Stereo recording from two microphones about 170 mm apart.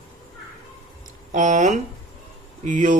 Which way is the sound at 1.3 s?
45° right (ahead or behind).